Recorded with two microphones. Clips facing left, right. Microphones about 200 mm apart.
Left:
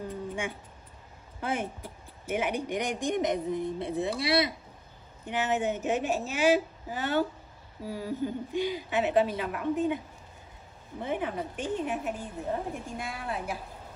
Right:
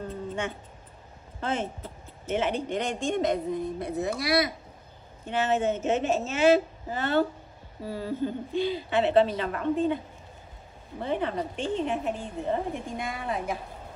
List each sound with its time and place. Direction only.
0.0 s a sound: 10° left (ahead or behind)
1.4 s speech: 10° left (ahead or behind)
5.2 s a woman's voice: 15° left (ahead or behind)
11.0 s a woman's voice: 10° left (ahead or behind)